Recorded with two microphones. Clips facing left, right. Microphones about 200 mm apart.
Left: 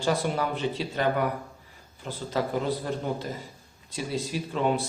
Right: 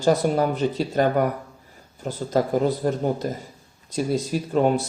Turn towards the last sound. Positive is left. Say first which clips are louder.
# right 6 dB
turn(degrees=-45)  # may be behind; listen again after turning